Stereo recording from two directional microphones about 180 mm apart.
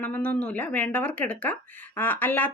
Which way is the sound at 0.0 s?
10° left (ahead or behind).